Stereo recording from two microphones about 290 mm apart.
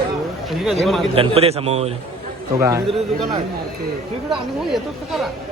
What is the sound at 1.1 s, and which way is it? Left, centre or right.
Speech, centre.